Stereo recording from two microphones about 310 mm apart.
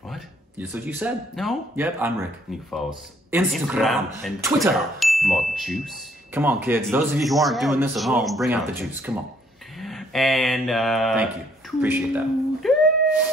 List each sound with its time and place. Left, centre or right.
0.1 s speech: centre
9.8 s mantra: centre
11.8 s a sound: centre